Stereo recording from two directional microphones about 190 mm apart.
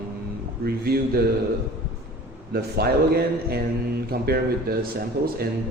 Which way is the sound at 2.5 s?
55° right (ahead or behind).